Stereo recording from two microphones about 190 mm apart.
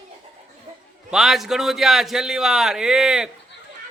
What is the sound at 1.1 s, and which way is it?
A man's voice, centre (ahead or behind).